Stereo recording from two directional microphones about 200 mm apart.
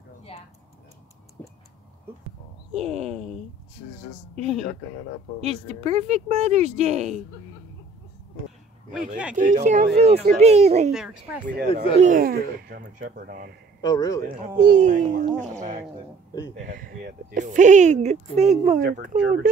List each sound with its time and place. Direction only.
2.7 s speech: 30° right (ahead or behind)
4.4 s speech: 30° right (ahead or behind)
8.9 s speech: 5° right (ahead or behind)
9.4 s speech: 40° right (ahead or behind)
10.9 s speech: 5° right (ahead or behind)
12.0 s speech: 45° right (ahead or behind)
13.7 s a man's voice: 20° left (ahead or behind)
14.6 s speech: 40° right (ahead or behind)
16.5 s speech: 45° right (ahead or behind)
18.8 s speech: 45° right (ahead or behind)